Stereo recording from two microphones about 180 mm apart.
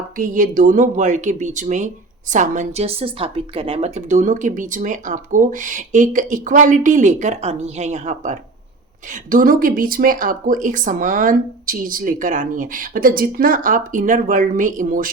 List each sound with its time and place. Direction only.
0.2 s a woman's voice: 50° right (ahead or behind)